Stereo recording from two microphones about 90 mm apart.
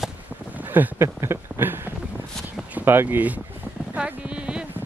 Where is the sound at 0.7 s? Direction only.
25° right (ahead or behind).